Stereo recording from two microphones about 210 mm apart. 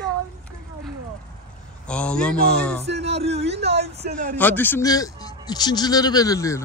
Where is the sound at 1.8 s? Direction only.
5° left (ahead or behind).